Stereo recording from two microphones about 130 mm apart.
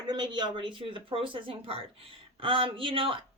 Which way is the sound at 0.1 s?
35° right (ahead or behind).